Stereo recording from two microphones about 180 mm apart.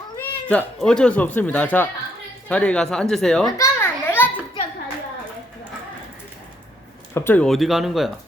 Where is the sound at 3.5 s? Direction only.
15° left (ahead or behind).